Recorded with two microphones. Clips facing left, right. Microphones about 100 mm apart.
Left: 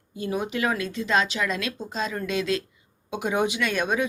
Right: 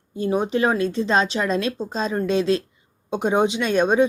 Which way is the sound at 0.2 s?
30° right (ahead or behind).